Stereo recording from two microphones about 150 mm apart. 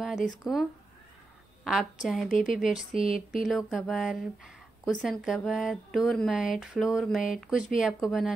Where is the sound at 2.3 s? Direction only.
60° left (ahead or behind).